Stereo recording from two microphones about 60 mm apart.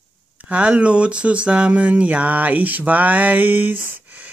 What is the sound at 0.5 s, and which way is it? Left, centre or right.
Speech, right.